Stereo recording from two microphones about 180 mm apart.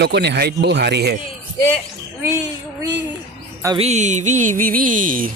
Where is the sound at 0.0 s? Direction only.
65° right (ahead or behind).